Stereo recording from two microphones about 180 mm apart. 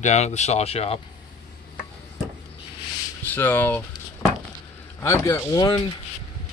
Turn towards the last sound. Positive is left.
turn(degrees=20)  # may be behind; listen again after turning